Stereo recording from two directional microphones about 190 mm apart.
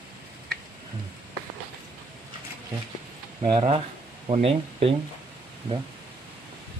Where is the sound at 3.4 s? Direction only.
30° right (ahead or behind).